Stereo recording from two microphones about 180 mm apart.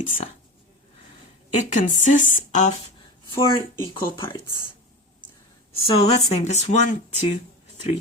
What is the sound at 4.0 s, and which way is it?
Speech, 25° left (ahead or behind).